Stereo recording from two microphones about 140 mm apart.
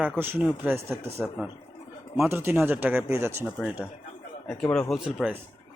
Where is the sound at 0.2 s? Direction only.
15° right (ahead or behind).